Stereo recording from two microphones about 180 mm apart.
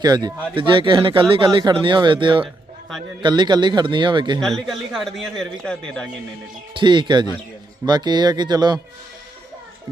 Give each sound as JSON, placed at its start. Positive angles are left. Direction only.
{"t": 0.0, "sound": "speech", "side_deg": -20}
{"t": 4.4, "sound": "a man's voice", "side_deg": 0}
{"t": 6.7, "sound": "speech", "side_deg": -25}